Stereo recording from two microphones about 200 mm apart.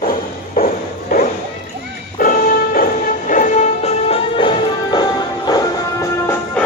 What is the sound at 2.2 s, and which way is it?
Music, 45° left (ahead or behind).